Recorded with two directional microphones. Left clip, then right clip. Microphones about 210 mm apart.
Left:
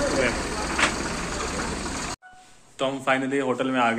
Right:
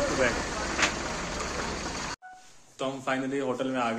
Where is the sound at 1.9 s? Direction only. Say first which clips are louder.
Left 3 dB; 55° left (ahead or behind).